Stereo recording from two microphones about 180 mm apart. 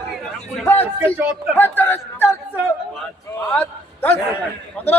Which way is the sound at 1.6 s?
10° left (ahead or behind).